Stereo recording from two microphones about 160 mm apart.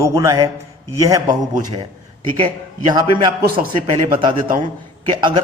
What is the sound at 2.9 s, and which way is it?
A man's voice, 25° right (ahead or behind).